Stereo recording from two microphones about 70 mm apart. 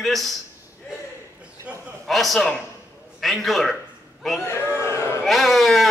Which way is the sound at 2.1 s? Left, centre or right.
Centre.